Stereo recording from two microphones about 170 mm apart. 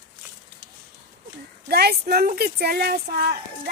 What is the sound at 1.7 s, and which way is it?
A child's voice, 70° right (ahead or behind).